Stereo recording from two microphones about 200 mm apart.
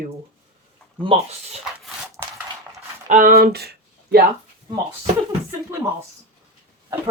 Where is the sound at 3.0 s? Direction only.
40° right (ahead or behind).